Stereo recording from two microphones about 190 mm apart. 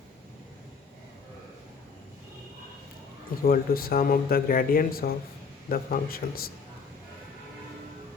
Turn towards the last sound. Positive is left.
turn(degrees=50)  # may be behind; listen again after turning